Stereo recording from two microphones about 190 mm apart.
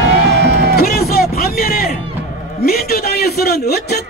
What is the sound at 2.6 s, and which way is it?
Speech, 55° left (ahead or behind).